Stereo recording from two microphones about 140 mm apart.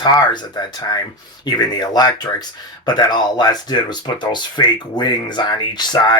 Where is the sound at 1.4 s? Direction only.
30° left (ahead or behind).